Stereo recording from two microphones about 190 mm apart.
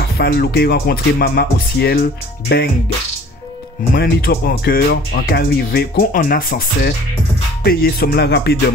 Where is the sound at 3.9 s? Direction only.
55° left (ahead or behind).